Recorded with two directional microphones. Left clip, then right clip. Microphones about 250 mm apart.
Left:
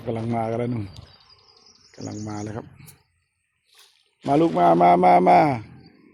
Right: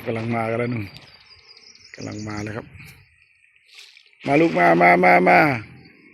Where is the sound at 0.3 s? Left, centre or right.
Centre.